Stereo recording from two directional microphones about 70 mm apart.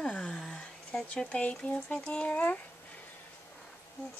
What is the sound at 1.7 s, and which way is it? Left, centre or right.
Speech, centre.